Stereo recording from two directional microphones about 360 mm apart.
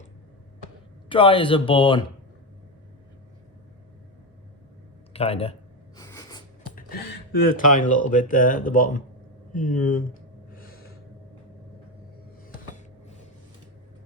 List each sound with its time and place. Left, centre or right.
1.1 s speech: centre
5.1 s speech: centre
6.0 s a sound: centre
7.5 s speech: left
10.5 s gasp: left